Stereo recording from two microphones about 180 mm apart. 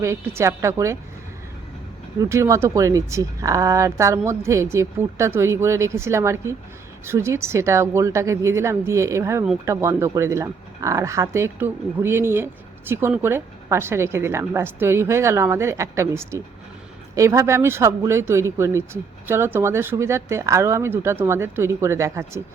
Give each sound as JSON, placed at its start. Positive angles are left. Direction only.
{"t": 0.0, "sound": "speech", "side_deg": -15}
{"t": 2.1, "sound": "speech", "side_deg": -15}